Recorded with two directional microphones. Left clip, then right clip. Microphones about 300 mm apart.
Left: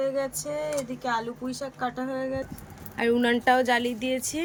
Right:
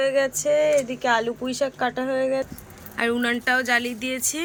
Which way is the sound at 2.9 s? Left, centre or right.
Centre.